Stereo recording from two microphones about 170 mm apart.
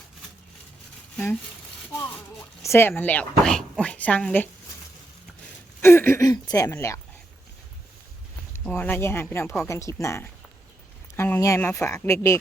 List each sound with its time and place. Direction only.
1.1 s speech: 10° left (ahead or behind)
2.6 s speech: 15° left (ahead or behind)
5.8 s speech: 15° left (ahead or behind)
8.7 s speech: 10° left (ahead or behind)